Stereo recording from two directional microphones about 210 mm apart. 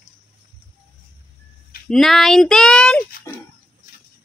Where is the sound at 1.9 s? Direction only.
Centre (ahead or behind).